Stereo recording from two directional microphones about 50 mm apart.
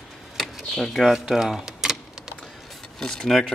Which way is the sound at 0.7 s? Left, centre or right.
Centre.